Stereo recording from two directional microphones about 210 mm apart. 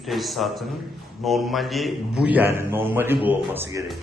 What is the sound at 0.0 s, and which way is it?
A man's voice, centre (ahead or behind).